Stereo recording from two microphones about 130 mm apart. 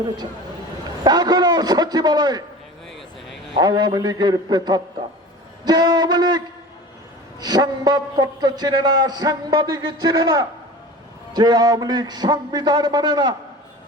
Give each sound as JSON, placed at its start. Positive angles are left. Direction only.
{"t": 1.0, "sound": "a man's voice", "side_deg": -30}
{"t": 3.6, "sound": "a man's voice", "side_deg": -30}